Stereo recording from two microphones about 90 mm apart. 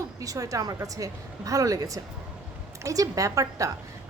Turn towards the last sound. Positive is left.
turn(degrees=-40)  # may be behind; listen again after turning